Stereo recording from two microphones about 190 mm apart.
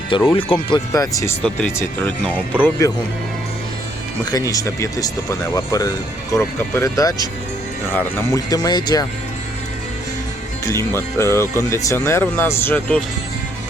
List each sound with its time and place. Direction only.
0.3 s speech: 25° left (ahead or behind)
4.3 s speech: 20° left (ahead or behind)
10.7 s speech: 15° left (ahead or behind)